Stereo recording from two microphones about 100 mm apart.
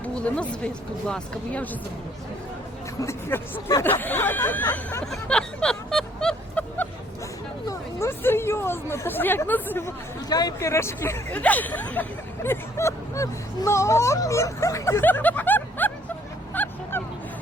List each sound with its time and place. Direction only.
0.0 s speech: 10° left (ahead or behind)
3.0 s speech: 25° left (ahead or behind)
5.1 s vehicle: 10° left (ahead or behind)
7.7 s chatter: 25° left (ahead or behind)
10.2 s speech: 40° left (ahead or behind)
11.3 s speech: 15° left (ahead or behind); by 15.0 s 30° left (ahead or behind)
15.0 s snicker: 20° left (ahead or behind)
16.6 s bow-wow: 15° left (ahead or behind)